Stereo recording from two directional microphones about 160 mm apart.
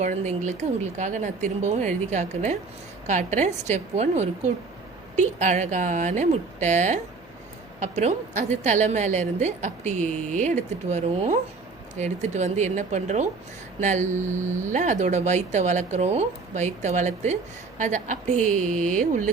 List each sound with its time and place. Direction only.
0.0 s a woman's voice: 50° right (ahead or behind)